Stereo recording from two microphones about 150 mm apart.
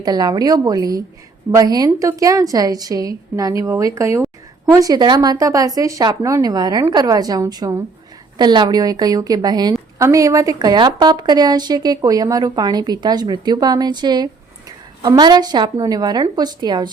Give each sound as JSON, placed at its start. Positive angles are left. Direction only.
{"t": 0.0, "sound": "a woman's voice", "side_deg": -25}
{"t": 4.8, "sound": "a woman's voice", "side_deg": -25}